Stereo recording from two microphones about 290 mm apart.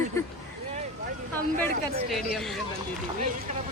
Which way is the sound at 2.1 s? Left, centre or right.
Centre.